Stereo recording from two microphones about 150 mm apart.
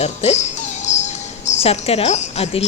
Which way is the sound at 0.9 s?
50° left (ahead or behind).